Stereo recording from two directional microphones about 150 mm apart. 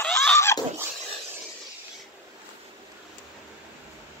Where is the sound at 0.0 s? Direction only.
5° left (ahead or behind).